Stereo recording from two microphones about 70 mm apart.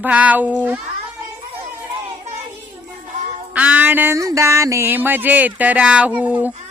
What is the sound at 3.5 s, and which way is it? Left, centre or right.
Music, centre.